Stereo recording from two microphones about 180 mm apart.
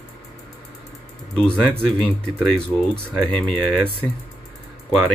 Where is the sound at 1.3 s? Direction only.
5° left (ahead or behind).